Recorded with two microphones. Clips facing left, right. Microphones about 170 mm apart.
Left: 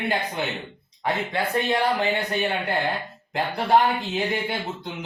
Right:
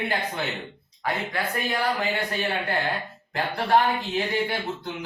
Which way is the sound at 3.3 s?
20° left (ahead or behind).